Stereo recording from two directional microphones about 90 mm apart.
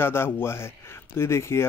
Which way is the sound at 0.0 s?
25° left (ahead or behind).